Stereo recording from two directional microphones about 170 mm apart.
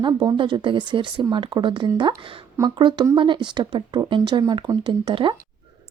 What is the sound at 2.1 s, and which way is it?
Speech, 15° right (ahead or behind).